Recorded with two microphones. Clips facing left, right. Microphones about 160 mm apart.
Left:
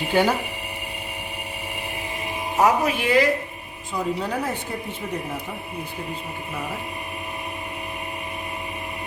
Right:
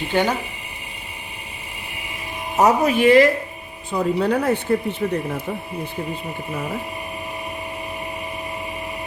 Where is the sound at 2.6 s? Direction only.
50° right (ahead or behind).